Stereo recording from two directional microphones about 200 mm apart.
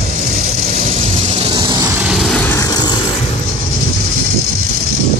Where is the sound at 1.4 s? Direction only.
25° right (ahead or behind).